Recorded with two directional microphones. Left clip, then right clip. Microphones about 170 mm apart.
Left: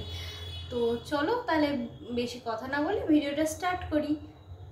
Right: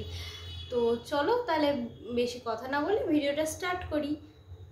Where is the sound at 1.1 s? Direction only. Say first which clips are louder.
Right 1 dB; 20° right (ahead or behind).